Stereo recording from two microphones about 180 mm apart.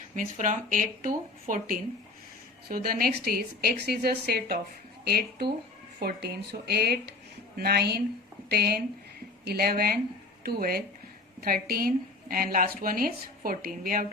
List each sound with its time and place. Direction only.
0.2 s a woman's voice: 45° right (ahead or behind)